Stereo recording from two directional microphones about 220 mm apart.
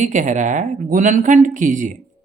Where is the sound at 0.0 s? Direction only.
35° right (ahead or behind).